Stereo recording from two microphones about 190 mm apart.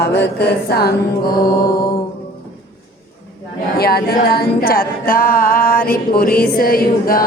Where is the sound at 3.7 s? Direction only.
55° left (ahead or behind).